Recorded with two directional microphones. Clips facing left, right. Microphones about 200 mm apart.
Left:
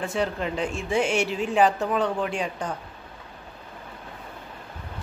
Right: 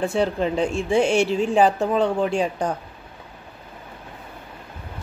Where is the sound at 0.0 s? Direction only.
30° right (ahead or behind).